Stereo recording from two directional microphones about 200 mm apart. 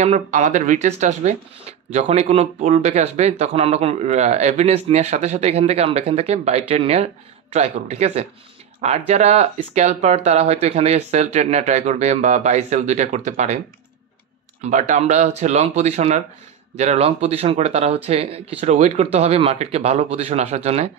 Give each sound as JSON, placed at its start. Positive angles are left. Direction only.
{"t": 0.0, "sound": "speech", "side_deg": -35}
{"t": 14.6, "sound": "speech", "side_deg": -35}